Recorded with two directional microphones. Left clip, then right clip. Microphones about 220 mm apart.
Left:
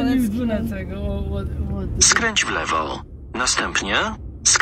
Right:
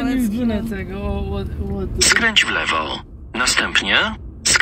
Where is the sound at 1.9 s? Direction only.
Centre (ahead or behind).